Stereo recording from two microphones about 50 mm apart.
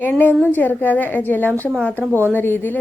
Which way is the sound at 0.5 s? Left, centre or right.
Left.